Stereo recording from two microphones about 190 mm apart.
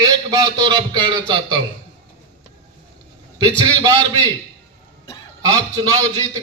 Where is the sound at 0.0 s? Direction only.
20° right (ahead or behind).